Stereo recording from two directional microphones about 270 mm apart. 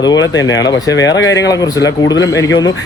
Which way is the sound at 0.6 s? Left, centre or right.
Centre.